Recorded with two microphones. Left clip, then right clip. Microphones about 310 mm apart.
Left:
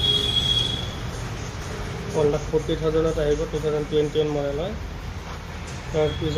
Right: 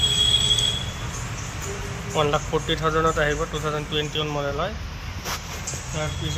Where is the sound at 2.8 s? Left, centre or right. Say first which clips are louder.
Right 1 dB; right.